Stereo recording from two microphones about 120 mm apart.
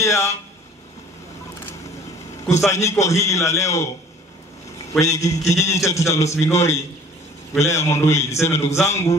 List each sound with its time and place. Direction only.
0.0 s a sound: 25° left (ahead or behind)
2.5 s a man's voice: 25° left (ahead or behind)
5.0 s a man's voice: 25° left (ahead or behind)